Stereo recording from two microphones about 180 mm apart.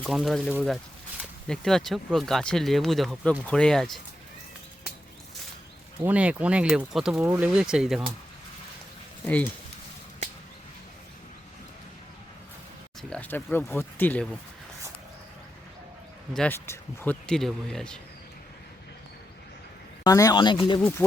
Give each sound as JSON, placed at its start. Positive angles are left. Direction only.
{"t": 0.0, "sound": "speech", "side_deg": 0}
{"t": 6.0, "sound": "speech", "side_deg": -10}
{"t": 9.2, "sound": "speech", "side_deg": 10}
{"t": 13.0, "sound": "speech", "side_deg": 5}
{"t": 16.3, "sound": "speech", "side_deg": 10}
{"t": 20.1, "sound": "speech", "side_deg": 20}